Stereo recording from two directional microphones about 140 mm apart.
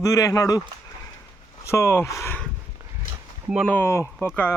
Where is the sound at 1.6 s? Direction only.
20° left (ahead or behind).